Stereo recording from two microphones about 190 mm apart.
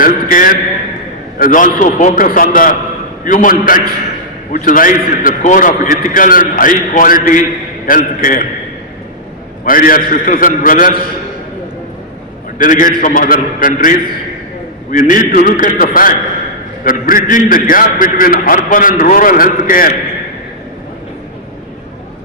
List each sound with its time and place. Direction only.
0.0 s a man's voice: 45° left (ahead or behind)
9.6 s a man's voice: 45° left (ahead or behind)
12.5 s a man's voice: 45° left (ahead or behind)